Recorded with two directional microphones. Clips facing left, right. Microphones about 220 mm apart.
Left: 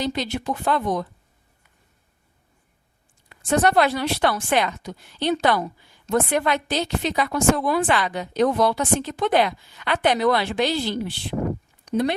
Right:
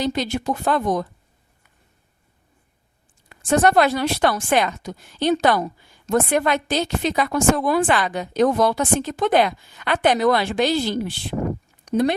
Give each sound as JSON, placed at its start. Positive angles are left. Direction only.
{"t": 0.0, "sound": "a woman's voice", "side_deg": -45}
{"t": 3.2, "sound": "a woman's voice", "side_deg": -45}